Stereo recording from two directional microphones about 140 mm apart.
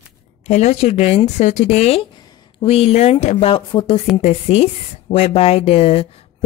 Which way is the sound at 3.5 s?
40° left (ahead or behind).